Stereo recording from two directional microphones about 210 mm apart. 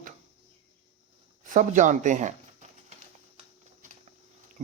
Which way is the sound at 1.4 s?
35° right (ahead or behind).